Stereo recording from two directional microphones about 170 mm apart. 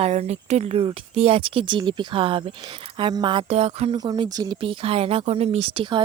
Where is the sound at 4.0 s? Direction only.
25° right (ahead or behind).